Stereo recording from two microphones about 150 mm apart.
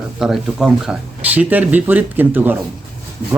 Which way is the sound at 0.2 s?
5° right (ahead or behind).